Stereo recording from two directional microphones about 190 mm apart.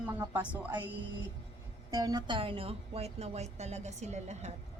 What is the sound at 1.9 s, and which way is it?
Speech, 20° right (ahead or behind).